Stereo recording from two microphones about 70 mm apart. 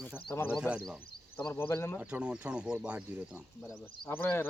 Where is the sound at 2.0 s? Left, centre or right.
Centre.